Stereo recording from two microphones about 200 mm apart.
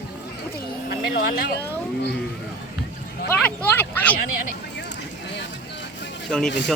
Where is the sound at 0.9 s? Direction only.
50° left (ahead or behind).